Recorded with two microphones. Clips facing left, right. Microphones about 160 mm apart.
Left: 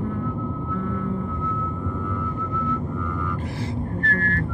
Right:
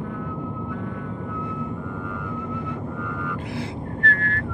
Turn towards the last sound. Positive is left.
turn(degrees=45)  # may be behind; listen again after turning